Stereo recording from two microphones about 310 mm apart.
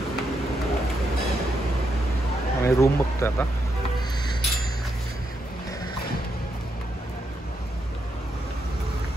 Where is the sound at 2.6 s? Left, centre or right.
Centre.